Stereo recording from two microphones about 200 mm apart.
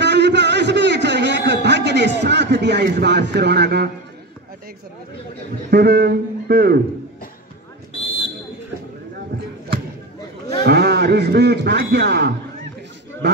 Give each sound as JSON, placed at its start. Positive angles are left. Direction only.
{"t": 0.0, "sound": "a sound", "side_deg": -60}
{"t": 5.7, "sound": "a man's voice", "side_deg": -50}
{"t": 10.6, "sound": "a man's voice", "side_deg": -55}